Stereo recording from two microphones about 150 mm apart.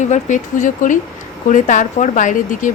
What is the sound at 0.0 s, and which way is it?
Speech, 55° left (ahead or behind).